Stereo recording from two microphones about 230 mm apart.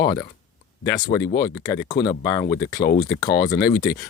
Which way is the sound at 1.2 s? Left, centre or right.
Left.